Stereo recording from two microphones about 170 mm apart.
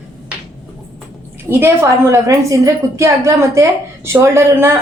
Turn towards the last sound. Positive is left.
turn(degrees=-15)  # may be behind; listen again after turning